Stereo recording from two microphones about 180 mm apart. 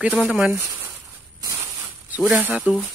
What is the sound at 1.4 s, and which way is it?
Zipper, 20° right (ahead or behind).